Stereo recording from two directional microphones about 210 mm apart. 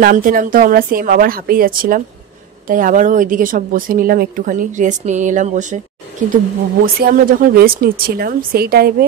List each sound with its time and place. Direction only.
0.0 s speech: 45° right (ahead or behind)